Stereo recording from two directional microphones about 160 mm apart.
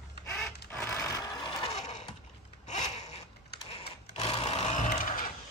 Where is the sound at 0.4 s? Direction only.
10° left (ahead or behind).